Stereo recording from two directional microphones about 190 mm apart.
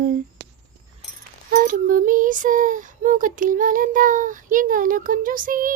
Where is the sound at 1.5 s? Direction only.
45° right (ahead or behind).